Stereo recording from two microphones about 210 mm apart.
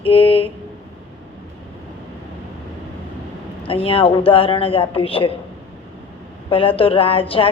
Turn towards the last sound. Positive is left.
turn(degrees=25)  # may be behind; listen again after turning